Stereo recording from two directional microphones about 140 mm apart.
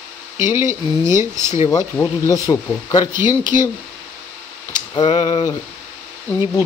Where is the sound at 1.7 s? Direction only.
25° left (ahead or behind).